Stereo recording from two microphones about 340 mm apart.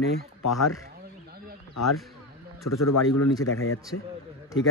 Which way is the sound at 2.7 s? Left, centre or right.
Left.